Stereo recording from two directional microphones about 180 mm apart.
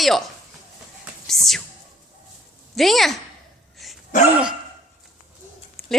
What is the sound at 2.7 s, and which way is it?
Speech, centre (ahead or behind).